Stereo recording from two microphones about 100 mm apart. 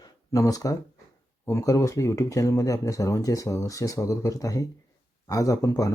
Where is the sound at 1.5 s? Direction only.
30° left (ahead or behind).